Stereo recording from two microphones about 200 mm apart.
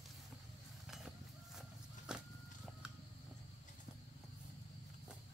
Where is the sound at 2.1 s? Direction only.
5° right (ahead or behind).